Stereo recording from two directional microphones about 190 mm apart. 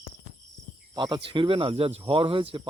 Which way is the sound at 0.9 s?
25° right (ahead or behind).